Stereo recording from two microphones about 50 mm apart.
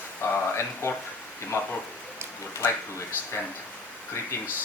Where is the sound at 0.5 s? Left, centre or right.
Left.